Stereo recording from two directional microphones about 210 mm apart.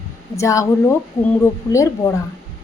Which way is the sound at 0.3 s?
15° left (ahead or behind).